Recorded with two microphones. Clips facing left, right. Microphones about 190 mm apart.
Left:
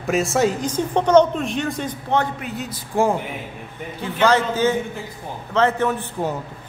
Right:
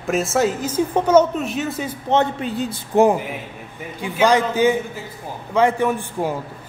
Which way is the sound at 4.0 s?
15° right (ahead or behind).